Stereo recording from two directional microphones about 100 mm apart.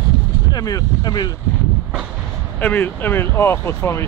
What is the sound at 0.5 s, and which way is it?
Speech, 40° left (ahead or behind).